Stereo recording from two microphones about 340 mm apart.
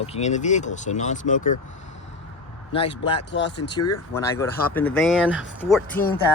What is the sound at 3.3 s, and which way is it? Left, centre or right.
Speech, left.